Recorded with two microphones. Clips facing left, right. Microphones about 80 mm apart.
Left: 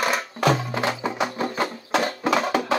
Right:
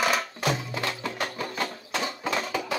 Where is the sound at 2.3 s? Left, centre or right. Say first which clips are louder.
Left 8 dB; left.